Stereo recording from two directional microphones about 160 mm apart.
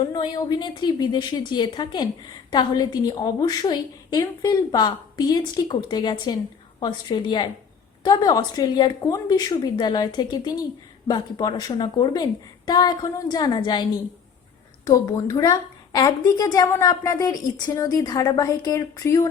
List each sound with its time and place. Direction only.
0.1 s a woman's voice: 25° left (ahead or behind)
14.8 s a woman's voice: 20° left (ahead or behind)